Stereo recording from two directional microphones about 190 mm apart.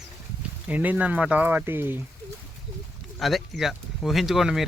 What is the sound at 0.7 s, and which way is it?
Speech, 10° right (ahead or behind).